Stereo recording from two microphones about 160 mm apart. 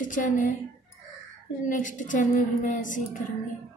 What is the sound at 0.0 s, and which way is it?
Speech, 55° left (ahead or behind).